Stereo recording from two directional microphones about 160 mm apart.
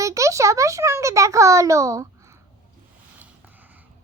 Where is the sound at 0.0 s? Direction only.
20° right (ahead or behind).